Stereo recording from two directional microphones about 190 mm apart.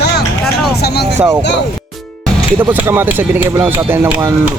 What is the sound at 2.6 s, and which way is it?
Speech, 10° right (ahead or behind).